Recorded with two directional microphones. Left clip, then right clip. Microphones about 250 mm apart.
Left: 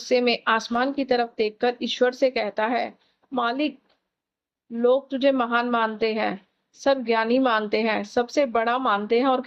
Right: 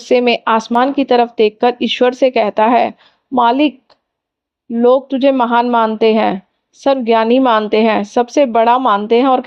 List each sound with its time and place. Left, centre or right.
0.0 s speech: right
4.8 s speech: right